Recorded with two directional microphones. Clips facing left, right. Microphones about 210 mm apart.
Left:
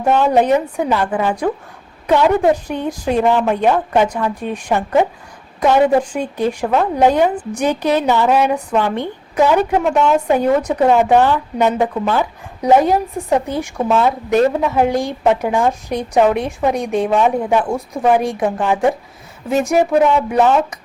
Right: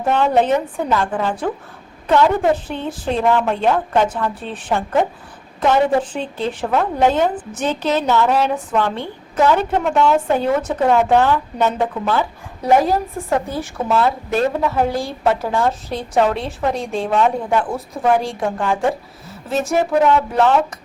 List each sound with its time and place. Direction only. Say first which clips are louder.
0.0 s a woman's voice: left 2 dB; 10° left (ahead or behind)
2.6 s a woman's voice: left 3 dB; 15° left (ahead or behind)